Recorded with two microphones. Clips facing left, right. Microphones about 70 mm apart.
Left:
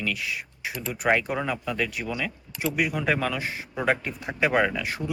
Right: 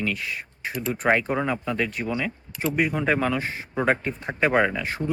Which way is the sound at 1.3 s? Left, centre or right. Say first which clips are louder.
Right 3 dB; right.